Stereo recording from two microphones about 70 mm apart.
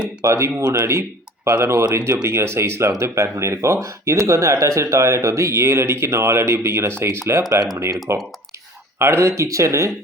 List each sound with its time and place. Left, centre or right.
0.3 s speech: right
1.9 s speech: right
2.2 s speech: right
7.5 s speech: right
8.1 s speech: right